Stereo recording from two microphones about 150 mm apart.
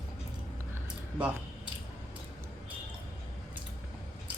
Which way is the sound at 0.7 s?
10° right (ahead or behind).